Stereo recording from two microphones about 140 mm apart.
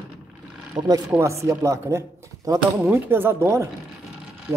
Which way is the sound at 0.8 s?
25° right (ahead or behind).